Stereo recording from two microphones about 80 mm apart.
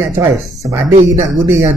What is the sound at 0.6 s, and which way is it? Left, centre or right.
Speech, right.